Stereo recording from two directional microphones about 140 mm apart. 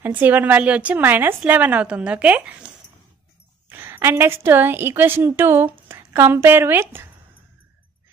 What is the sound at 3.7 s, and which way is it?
A woman's voice, 15° right (ahead or behind).